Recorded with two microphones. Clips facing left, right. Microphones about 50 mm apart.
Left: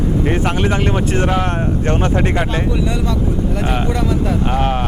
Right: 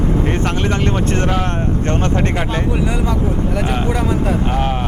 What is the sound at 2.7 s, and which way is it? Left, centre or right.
Speech, right.